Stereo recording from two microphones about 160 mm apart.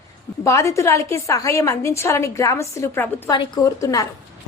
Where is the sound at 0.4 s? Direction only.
20° left (ahead or behind).